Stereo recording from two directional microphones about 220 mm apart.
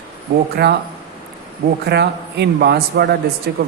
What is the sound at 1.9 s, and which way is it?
Speech, 50° right (ahead or behind).